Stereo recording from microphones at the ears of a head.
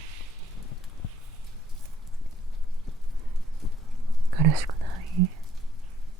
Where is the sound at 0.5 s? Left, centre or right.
Left.